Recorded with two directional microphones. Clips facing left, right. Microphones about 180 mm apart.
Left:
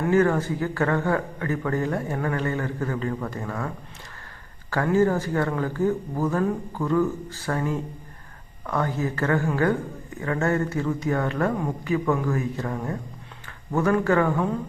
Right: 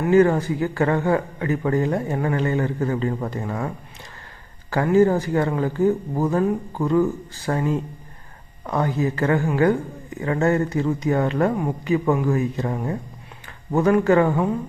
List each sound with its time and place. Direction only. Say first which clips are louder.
0.1 s a man's voice: right 5 dB; 15° right (ahead or behind)
4.7 s a man's voice: right 4 dB; 15° right (ahead or behind)